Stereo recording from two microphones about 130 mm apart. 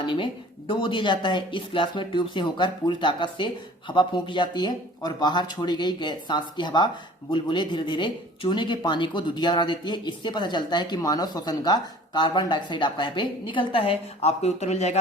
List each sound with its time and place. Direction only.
0.0 s a woman's voice: 40° left (ahead or behind); by 14.9 s 55° left (ahead or behind)